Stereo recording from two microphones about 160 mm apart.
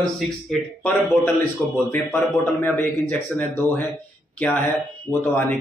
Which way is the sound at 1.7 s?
10° left (ahead or behind).